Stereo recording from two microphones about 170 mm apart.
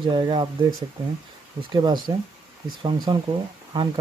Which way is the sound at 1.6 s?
25° right (ahead or behind).